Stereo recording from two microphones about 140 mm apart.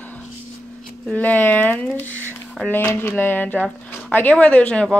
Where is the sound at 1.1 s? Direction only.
10° left (ahead or behind).